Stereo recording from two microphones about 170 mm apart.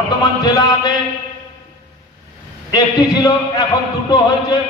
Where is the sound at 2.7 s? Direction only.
20° left (ahead or behind).